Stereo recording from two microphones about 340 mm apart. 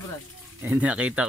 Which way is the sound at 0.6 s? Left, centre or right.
Centre.